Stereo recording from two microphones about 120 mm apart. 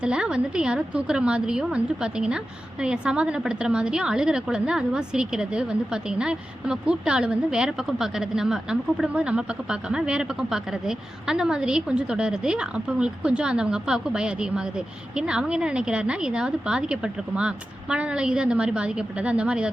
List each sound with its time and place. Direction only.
0.0 s a woman's voice: 5° right (ahead or behind)